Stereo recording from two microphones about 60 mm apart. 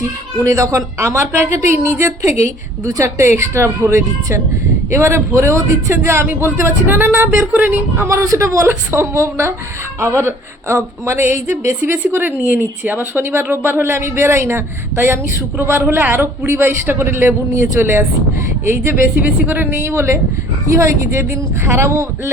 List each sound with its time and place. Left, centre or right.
0.0 s a woman's voice: right
6.2 s a woman's voice: right
7.5 s speech: right
8.0 s speech: right
8.4 s a woman's voice: right
16.5 s a woman's voice: right
19.7 s a woman's voice: right
20.7 s a woman's voice: right